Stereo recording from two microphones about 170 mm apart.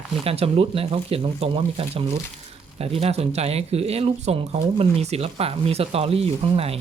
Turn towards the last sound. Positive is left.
turn(degrees=-35)  # may be behind; listen again after turning